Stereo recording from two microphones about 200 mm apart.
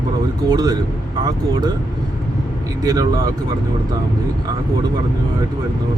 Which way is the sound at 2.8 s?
20° right (ahead or behind).